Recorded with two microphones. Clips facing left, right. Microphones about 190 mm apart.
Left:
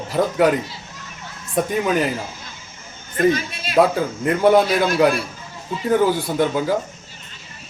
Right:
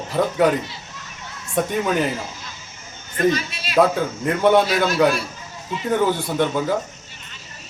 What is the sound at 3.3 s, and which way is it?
Speech, 50° left (ahead or behind).